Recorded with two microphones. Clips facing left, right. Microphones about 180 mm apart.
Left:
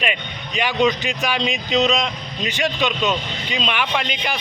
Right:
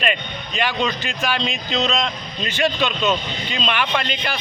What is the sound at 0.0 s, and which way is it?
Speech, 5° left (ahead or behind).